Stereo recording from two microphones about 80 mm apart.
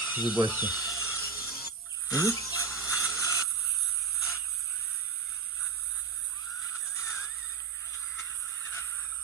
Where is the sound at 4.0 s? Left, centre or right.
Centre.